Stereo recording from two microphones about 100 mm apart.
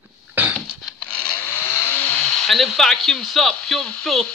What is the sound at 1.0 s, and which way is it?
Chainsaw, 15° left (ahead or behind).